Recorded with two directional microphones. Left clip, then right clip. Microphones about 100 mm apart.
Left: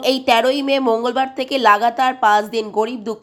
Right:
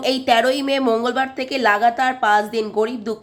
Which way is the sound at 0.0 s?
20° left (ahead or behind).